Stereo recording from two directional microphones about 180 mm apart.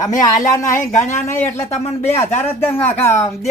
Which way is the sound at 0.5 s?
15° left (ahead or behind).